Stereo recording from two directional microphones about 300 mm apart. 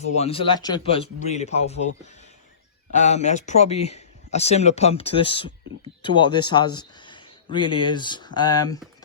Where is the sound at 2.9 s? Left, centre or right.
Left.